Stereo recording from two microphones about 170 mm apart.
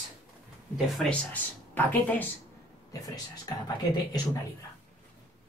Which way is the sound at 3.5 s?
25° left (ahead or behind).